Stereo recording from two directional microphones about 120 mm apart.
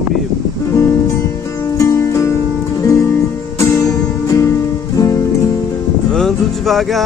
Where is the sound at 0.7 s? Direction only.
25° left (ahead or behind).